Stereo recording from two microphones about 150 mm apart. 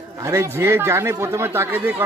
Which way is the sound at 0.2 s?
20° right (ahead or behind).